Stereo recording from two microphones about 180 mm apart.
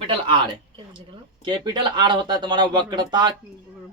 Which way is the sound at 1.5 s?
25° right (ahead or behind).